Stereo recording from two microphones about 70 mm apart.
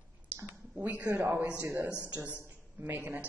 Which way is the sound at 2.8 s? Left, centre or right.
Right.